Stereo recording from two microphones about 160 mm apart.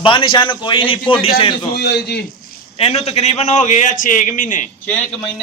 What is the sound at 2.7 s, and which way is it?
A man's voice, 40° left (ahead or behind).